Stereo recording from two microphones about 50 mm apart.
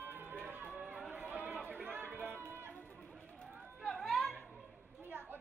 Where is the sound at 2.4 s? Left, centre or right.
Right.